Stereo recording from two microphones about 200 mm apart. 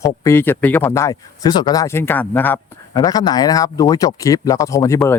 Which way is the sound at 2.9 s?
20° left (ahead or behind).